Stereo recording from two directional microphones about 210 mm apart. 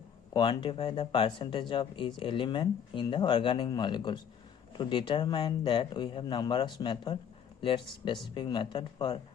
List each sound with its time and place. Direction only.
0.3 s speech: 20° left (ahead or behind)